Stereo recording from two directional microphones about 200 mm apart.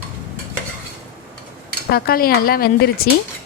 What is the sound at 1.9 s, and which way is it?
Stir, 50° left (ahead or behind).